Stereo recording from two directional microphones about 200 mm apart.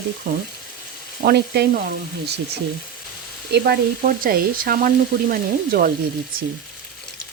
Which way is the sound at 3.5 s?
50° right (ahead or behind).